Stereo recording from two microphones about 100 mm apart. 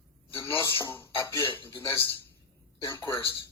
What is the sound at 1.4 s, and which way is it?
Speech, 50° left (ahead or behind).